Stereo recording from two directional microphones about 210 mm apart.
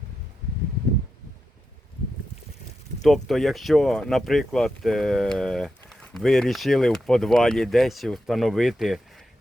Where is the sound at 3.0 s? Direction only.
Centre (ahead or behind).